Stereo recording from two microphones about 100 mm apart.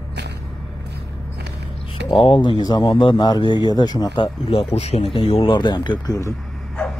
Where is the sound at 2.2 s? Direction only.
60° left (ahead or behind).